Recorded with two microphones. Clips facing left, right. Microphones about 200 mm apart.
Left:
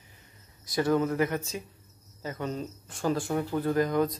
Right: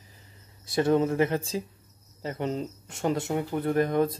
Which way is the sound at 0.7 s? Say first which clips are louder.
Right 2 dB; 25° right (ahead or behind).